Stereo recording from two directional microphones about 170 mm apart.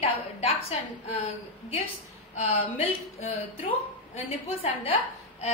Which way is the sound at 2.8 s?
40° left (ahead or behind).